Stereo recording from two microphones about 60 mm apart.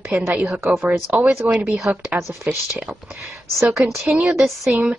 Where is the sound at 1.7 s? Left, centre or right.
Centre.